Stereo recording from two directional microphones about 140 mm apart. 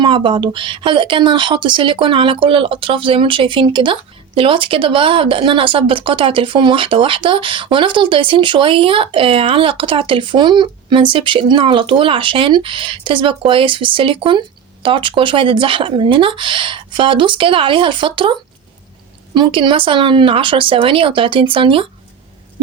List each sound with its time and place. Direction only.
0.0 s speech: 35° right (ahead or behind)